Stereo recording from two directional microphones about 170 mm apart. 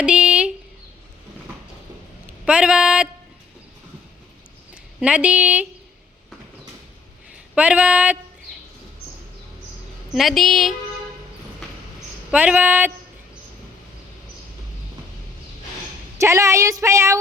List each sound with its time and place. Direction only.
0.0 s a sound: 5° right (ahead or behind)
2.4 s a sound: 5° right (ahead or behind)
4.7 s speech: 5° right (ahead or behind)
7.5 s speech: 5° right (ahead or behind)
10.2 s a woman's voice: centre (ahead or behind)
12.3 s speech: 10° right (ahead or behind)
16.1 s speech: 15° right (ahead or behind)